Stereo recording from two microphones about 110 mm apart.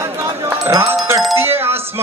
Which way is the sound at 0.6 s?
30° right (ahead or behind).